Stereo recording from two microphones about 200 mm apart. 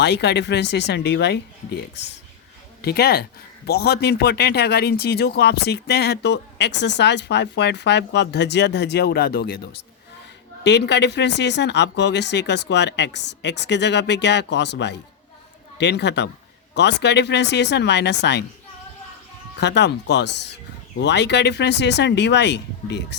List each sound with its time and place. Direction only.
0.0 s speech: 55° left (ahead or behind)
19.5 s speech: 60° left (ahead or behind)